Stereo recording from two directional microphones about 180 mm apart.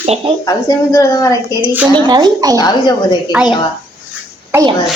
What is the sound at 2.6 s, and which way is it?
Speech, 25° left (ahead or behind).